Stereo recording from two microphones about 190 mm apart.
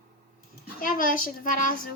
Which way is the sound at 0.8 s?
45° left (ahead or behind).